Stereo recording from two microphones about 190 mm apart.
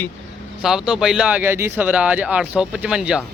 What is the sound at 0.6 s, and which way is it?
Speech, 5° right (ahead or behind).